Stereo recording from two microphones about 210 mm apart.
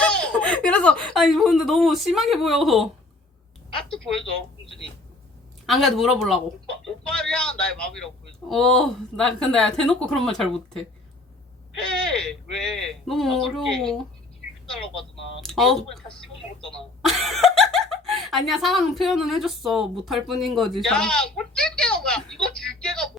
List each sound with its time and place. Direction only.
0.0 s speech: 5° left (ahead or behind)
4.2 s speech: 25° left (ahead or behind)
5.6 s speech: centre (ahead or behind)
15.4 s speech: centre (ahead or behind)